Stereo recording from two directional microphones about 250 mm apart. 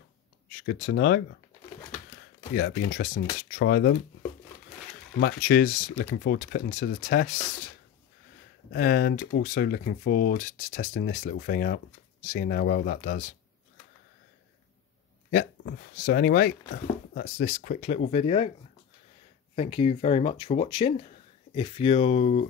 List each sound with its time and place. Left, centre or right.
0.5 s speech: left
2.5 s speech: left
5.2 s speech: left
8.7 s speech: left
15.3 s speech: left
19.5 s speech: left